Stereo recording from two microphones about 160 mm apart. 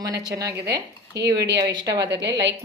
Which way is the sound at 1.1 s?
90° right.